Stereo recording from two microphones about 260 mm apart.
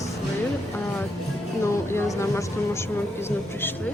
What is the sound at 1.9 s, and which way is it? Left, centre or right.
Speech, centre.